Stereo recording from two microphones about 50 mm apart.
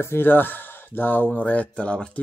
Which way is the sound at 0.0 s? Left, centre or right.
Left.